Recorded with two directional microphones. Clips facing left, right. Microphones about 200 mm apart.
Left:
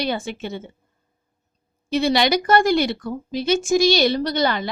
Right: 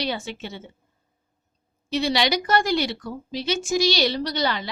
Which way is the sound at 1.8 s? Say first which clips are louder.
Left 4 dB; 50° left (ahead or behind).